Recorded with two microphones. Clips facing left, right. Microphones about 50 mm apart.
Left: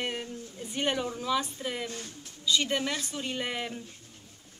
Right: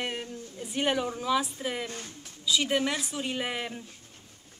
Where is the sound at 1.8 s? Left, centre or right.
Right.